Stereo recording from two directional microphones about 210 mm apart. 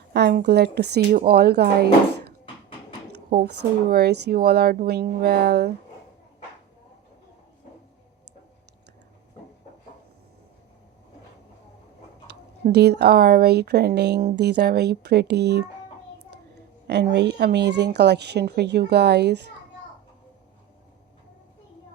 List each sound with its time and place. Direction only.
0.1 s speech: 55° right (ahead or behind)
3.2 s speech: 45° right (ahead or behind)
12.3 s speech: 50° right (ahead or behind)
16.8 s speech: 55° right (ahead or behind)